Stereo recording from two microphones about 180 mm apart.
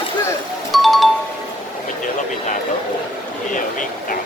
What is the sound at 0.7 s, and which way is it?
Music, centre (ahead or behind).